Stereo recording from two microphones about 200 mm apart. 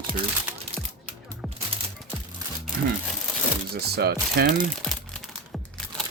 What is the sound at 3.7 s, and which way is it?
Speech, 50° right (ahead or behind).